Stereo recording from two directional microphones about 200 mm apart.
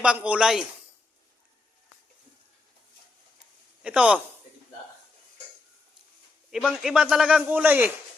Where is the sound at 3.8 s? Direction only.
5° right (ahead or behind).